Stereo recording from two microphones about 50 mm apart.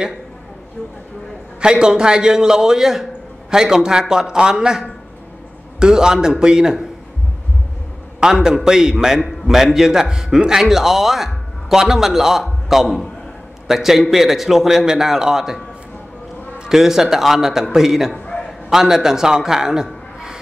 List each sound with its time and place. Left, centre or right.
1.6 s a man's voice: centre
8.2 s a man's voice: centre
18.1 s a sound: left
18.7 s a man's voice: centre